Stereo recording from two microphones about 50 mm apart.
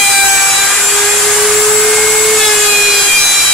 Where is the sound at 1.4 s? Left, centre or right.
Centre.